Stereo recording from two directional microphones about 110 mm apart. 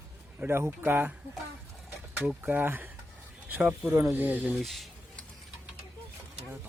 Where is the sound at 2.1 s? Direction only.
15° right (ahead or behind).